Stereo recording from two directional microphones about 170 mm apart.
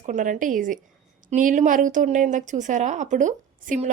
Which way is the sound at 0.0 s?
50° right (ahead or behind).